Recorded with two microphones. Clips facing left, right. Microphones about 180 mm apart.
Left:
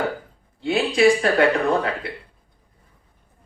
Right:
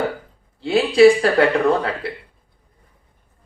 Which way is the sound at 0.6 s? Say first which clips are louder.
Right 5 dB; 30° right (ahead or behind).